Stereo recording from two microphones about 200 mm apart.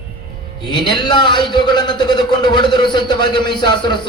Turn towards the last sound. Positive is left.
turn(degrees=20)  # may be behind; listen again after turning